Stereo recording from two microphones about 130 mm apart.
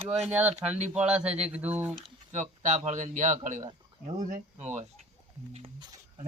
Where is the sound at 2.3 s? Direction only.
65° right (ahead or behind).